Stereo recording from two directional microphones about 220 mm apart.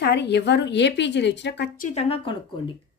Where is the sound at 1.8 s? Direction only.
30° left (ahead or behind).